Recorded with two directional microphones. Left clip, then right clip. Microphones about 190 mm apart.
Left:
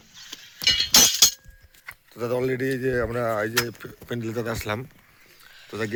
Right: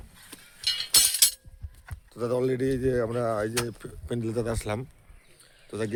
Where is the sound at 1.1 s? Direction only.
30° right (ahead or behind).